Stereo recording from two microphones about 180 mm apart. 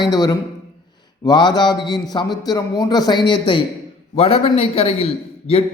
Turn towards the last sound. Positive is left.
turn(degrees=35)  # may be behind; listen again after turning